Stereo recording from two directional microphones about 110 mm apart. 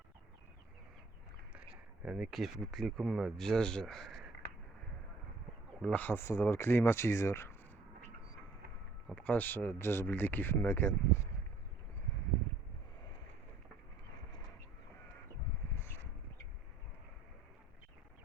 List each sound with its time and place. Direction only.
1.5 s speech: 10° right (ahead or behind)
5.8 s speech: 15° left (ahead or behind)
9.0 s speech: 10° left (ahead or behind)